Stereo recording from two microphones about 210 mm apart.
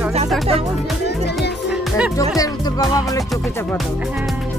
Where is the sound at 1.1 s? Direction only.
55° left (ahead or behind).